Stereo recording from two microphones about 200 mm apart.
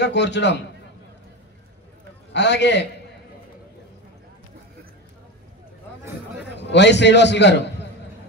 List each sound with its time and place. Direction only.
0.0 s a man's voice: 60° left (ahead or behind)
2.3 s a man's voice: 60° left (ahead or behind)
6.6 s a man's voice: 60° left (ahead or behind)